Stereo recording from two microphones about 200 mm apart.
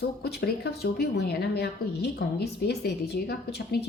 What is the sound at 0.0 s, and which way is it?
Speech, 55° left (ahead or behind).